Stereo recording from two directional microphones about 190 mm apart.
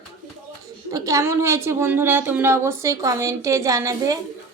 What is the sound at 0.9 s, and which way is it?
A woman's voice, 15° right (ahead or behind).